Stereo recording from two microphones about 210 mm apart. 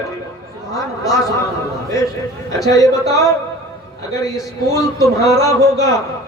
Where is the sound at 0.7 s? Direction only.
15° left (ahead or behind).